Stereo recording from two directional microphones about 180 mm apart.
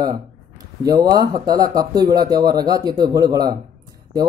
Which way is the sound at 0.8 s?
20° right (ahead or behind).